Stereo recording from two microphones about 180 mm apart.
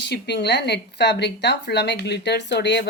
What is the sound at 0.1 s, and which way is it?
A woman's voice, 70° left (ahead or behind).